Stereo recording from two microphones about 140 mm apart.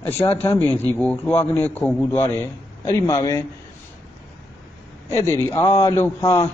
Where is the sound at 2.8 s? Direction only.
25° left (ahead or behind).